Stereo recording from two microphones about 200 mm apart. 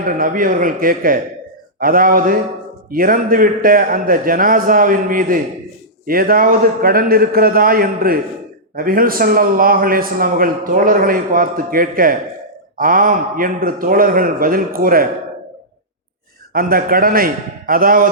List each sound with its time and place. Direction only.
0.1 s a man's voice: 45° right (ahead or behind)
16.5 s a man's voice: 45° right (ahead or behind)